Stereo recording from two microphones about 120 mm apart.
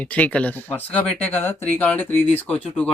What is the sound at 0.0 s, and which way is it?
Speech, 10° left (ahead or behind).